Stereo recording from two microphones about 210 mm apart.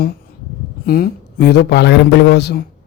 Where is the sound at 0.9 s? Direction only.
45° left (ahead or behind).